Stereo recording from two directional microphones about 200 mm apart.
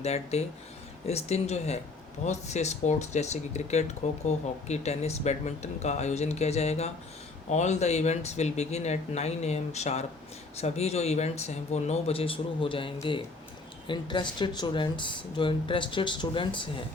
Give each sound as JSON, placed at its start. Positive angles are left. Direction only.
{"t": 0.0, "sound": "speech", "side_deg": 30}